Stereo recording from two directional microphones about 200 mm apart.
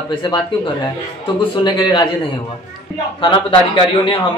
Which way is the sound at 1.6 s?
20° left (ahead or behind).